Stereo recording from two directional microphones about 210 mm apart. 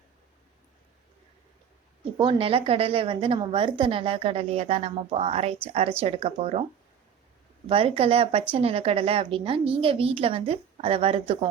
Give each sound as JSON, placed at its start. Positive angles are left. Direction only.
{"t": 2.1, "sound": "a woman's voice", "side_deg": -25}
{"t": 7.7, "sound": "a woman's voice", "side_deg": -25}